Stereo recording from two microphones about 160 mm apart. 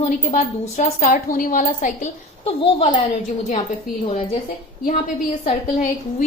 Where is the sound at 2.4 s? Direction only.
35° left (ahead or behind).